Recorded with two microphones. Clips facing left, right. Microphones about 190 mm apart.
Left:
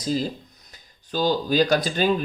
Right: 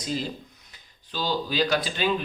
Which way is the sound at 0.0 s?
40° left (ahead or behind).